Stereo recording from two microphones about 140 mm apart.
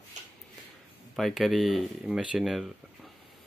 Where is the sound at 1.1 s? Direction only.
Centre (ahead or behind).